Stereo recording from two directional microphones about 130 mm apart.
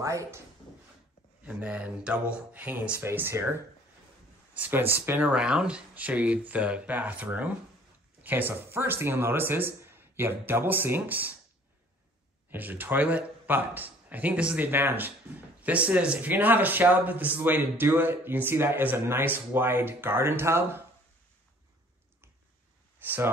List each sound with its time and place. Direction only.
0.0 s speech: 25° right (ahead or behind)
1.4 s speech: 10° right (ahead or behind)
12.4 s speech: 15° right (ahead or behind)
23.0 s speech: 15° right (ahead or behind)